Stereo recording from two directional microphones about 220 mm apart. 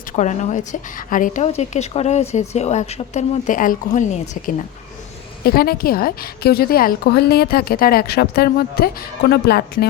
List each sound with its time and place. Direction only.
0.2 s a woman's voice: 35° left (ahead or behind)